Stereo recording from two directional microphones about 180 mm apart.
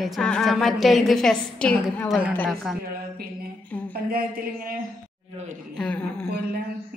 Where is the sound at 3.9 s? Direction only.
55° right (ahead or behind).